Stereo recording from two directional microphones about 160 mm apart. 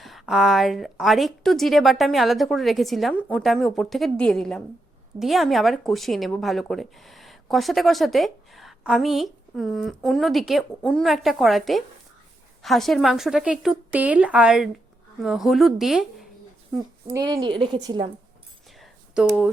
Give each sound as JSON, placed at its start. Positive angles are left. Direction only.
{"t": 0.0, "sound": "speech", "side_deg": 0}
{"t": 17.2, "sound": "a woman's voice", "side_deg": -25}
{"t": 18.8, "sound": "a sound", "side_deg": -5}